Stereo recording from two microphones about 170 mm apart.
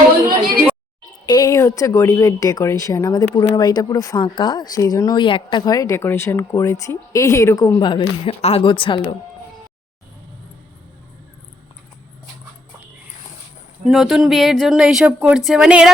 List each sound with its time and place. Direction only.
1.3 s speech: 20° left (ahead or behind)
13.8 s speech: centre (ahead or behind)